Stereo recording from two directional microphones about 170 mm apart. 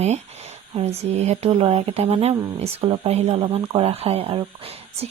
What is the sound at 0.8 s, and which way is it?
Speech, 40° right (ahead or behind).